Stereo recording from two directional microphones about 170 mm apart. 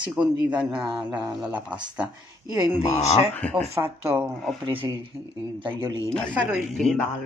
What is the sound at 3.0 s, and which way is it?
Speech, 10° left (ahead or behind).